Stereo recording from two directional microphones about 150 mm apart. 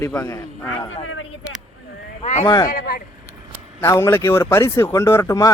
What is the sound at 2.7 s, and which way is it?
Speech, 80° left.